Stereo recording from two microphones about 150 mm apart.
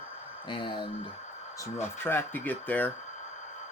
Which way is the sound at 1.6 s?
15° left (ahead or behind).